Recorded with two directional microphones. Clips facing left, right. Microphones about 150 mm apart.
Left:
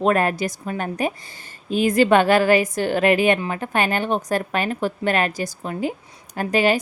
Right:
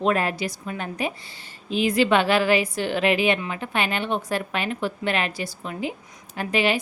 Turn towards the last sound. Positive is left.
turn(degrees=45)  # may be behind; listen again after turning